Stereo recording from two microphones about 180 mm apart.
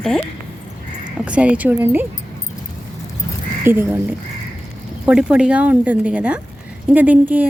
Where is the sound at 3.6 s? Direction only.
10° right (ahead or behind).